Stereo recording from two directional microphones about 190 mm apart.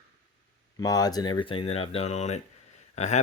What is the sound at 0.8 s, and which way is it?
Speech, 20° left (ahead or behind).